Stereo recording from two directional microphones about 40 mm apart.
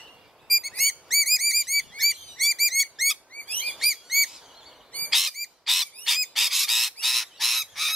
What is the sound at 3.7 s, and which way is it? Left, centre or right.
Bird vocalization, centre.